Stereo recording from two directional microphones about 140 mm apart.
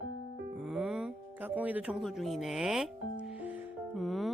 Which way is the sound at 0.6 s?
5° right (ahead or behind).